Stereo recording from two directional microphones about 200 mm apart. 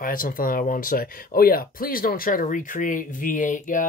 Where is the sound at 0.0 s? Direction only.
45° left (ahead or behind).